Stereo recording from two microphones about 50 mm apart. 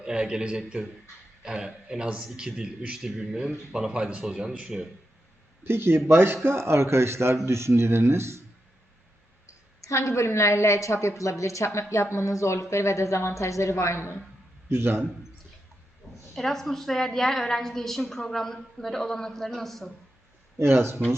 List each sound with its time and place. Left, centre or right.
0.0 s a man's voice: centre
5.6 s a man's voice: right
9.8 s speech: left
14.7 s speech: right
16.3 s a woman's voice: centre
20.6 s speech: right